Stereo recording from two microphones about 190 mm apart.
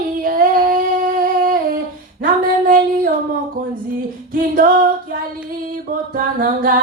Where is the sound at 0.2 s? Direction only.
45° right (ahead or behind).